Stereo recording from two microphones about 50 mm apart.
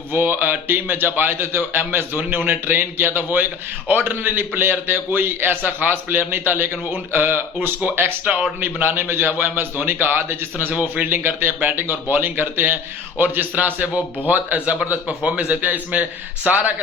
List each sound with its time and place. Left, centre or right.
0.1 s a man's voice: right
8.2 s a man's voice: right
8.6 s a man's voice: right
15.2 s a man's voice: centre
15.4 s a man's voice: right